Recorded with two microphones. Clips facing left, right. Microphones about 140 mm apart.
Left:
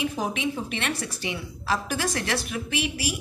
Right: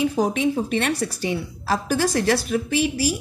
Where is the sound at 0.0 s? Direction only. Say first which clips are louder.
Right 7 dB; 40° right (ahead or behind).